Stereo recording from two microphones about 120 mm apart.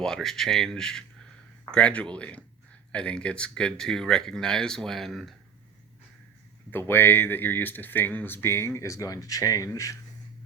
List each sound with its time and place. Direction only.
0.0 s speech: 5° left (ahead or behind)
6.7 s speech: 15° left (ahead or behind)